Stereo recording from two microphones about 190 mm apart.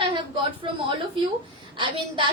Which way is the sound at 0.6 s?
30° right (ahead or behind).